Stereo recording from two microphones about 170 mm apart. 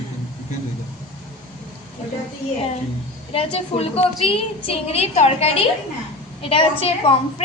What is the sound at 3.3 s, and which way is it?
A woman's voice, 35° left (ahead or behind).